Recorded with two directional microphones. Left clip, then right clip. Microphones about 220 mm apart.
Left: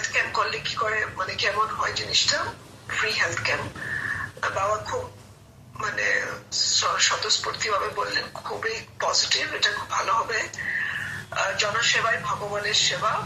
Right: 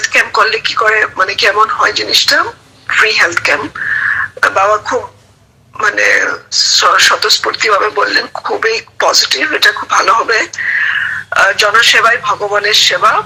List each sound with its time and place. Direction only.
0.0 s a man's voice: 40° right (ahead or behind)